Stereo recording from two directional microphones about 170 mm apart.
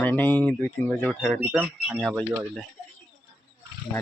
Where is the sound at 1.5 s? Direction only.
5° right (ahead or behind).